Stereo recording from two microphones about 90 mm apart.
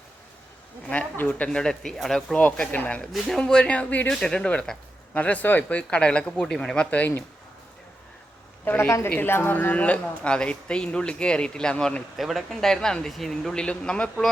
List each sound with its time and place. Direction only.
0.9 s a woman's voice: 20° left (ahead or behind)
1.5 s a woman's voice: 5° left (ahead or behind)
2.4 s a woman's voice: 15° left (ahead or behind)
3.1 s a woman's voice: centre (ahead or behind)
8.6 s a woman's voice: 25° left (ahead or behind)